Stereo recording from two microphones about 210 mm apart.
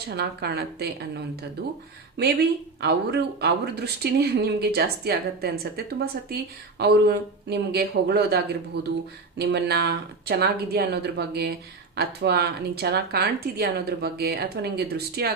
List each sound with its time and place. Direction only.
0.2 s a woman's voice: 50° right (ahead or behind)